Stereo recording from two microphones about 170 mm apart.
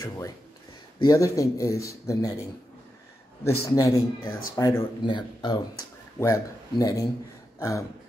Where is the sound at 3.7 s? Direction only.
20° left (ahead or behind).